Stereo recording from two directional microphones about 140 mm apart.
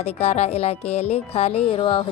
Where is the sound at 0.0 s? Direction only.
50° left (ahead or behind).